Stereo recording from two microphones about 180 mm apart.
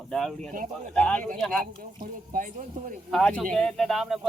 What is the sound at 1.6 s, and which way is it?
Speech, 50° right (ahead or behind).